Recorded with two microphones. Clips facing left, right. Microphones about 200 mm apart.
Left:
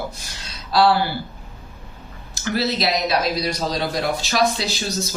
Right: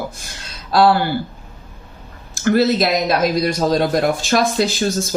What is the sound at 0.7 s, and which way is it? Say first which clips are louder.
Speech: right 3 dB; 50° right (ahead or behind).